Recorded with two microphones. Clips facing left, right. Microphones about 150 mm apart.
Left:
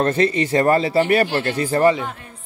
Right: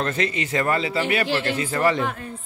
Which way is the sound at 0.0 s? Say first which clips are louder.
Left 7 dB; 35° left (ahead or behind).